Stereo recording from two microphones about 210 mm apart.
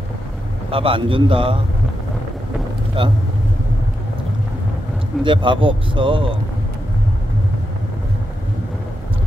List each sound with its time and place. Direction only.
0.7 s speech: 25° right (ahead or behind)
3.0 s speech: 25° right (ahead or behind)
5.2 s speech: 25° right (ahead or behind)